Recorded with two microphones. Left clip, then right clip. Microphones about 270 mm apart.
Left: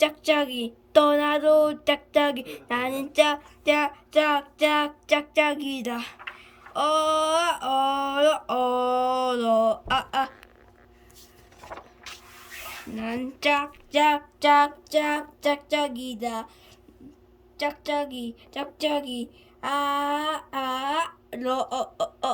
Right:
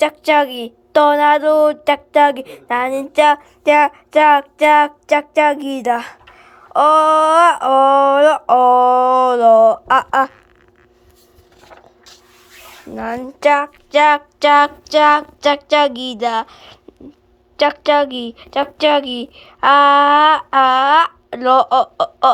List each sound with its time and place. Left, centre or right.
0.0 s speech: centre
13.0 s a woman's voice: centre